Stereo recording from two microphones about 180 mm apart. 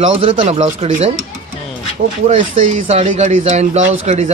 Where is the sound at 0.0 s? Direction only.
30° right (ahead or behind).